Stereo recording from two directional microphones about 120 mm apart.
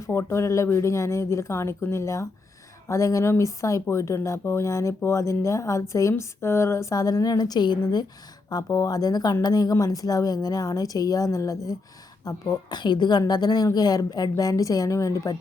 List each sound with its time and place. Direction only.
0.1 s speech: 20° left (ahead or behind)